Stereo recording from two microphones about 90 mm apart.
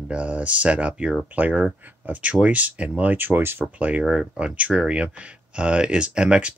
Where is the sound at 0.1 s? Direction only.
15° right (ahead or behind).